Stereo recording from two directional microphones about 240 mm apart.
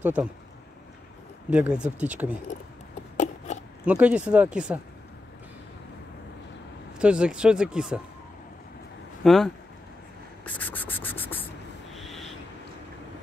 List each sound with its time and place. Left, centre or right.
0.0 s speech: centre
1.5 s speech: centre
3.5 s a sound: left
3.8 s speech: centre
7.0 s speech: centre
9.2 s speech: centre
10.4 s a sound: centre
11.9 s owl: centre